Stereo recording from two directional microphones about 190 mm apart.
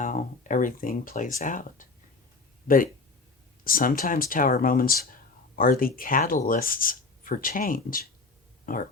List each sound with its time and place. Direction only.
0.0 s speech: 45° left (ahead or behind)